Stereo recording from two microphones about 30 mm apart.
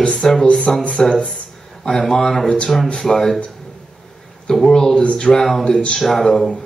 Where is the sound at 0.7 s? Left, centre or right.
Centre.